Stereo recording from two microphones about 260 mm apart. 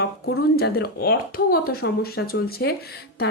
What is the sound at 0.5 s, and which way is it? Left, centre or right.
A woman's voice, left.